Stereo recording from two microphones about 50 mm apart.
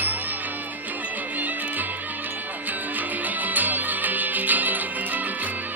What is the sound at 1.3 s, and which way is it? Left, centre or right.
Music, right.